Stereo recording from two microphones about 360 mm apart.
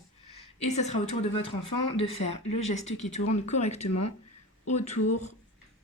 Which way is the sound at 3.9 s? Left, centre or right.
Left.